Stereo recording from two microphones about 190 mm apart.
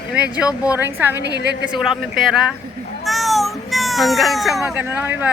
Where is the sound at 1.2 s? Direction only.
60° right (ahead or behind).